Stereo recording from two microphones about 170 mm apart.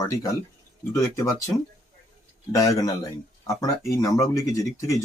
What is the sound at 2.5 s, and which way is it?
Speech, 20° left (ahead or behind).